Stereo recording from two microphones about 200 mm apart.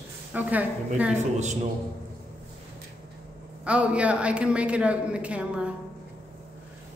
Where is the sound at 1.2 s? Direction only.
35° right (ahead or behind).